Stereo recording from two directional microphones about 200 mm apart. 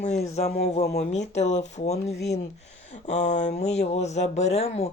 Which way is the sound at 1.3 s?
35° left (ahead or behind).